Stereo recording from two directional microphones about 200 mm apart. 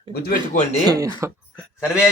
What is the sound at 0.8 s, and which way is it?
Speech, 20° right (ahead or behind).